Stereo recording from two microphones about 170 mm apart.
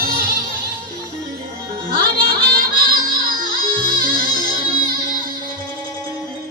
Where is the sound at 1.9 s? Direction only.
60° right (ahead or behind).